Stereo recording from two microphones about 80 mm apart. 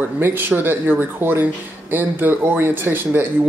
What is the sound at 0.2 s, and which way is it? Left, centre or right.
A man's voice, right.